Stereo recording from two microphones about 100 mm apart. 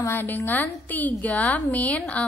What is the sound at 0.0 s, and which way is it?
A woman's voice, 20° left (ahead or behind).